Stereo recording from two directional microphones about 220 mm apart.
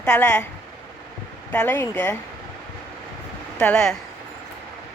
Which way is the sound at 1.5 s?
5° left (ahead or behind).